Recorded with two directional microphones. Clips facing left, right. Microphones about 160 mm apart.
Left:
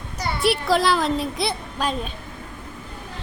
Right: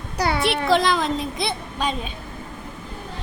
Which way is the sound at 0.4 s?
5° left (ahead or behind).